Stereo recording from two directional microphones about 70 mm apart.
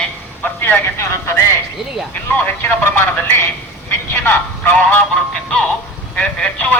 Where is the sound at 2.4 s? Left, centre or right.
Left.